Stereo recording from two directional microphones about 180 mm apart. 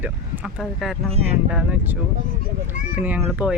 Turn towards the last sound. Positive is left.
turn(degrees=-5)  # may be behind; listen again after turning